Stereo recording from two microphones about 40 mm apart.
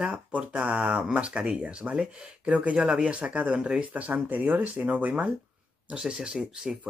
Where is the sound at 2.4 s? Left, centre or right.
Right.